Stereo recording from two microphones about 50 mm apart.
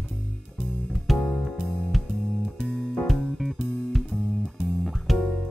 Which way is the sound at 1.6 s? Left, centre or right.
Centre.